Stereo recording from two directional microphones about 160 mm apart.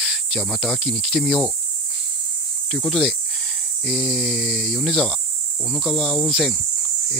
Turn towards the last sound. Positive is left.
turn(degrees=0)  # may be behind; listen again after turning